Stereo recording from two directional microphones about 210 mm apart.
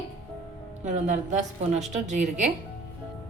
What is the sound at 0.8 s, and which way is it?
A woman's voice, 35° right (ahead or behind).